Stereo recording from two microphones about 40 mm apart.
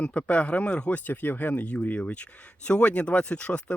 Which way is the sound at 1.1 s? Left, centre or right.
Left.